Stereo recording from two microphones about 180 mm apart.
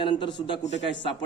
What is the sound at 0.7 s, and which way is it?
Speech, 80° left.